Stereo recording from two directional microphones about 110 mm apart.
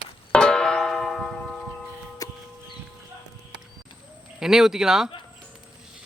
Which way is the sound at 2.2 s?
30° left (ahead or behind).